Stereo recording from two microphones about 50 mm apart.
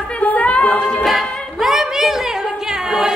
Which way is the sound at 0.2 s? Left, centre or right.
Left.